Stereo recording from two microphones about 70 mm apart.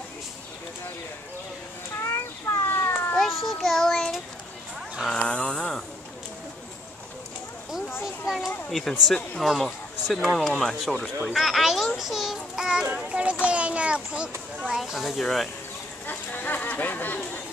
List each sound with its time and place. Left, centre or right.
2.0 s children playing: left
3.2 s child singing: centre
5.1 s a sound: centre
8.0 s children playing: centre
8.6 s speech: centre
12.0 s child singing: centre
12.9 s speech: centre
14.7 s speech: centre
16.1 s speech: left